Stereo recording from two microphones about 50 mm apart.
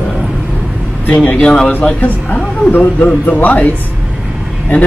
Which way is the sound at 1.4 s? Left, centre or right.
Centre.